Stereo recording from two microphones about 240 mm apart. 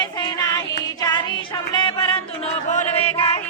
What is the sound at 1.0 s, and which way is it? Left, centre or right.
Music, centre.